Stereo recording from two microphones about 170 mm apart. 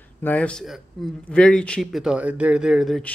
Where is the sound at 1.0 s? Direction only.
Centre (ahead or behind).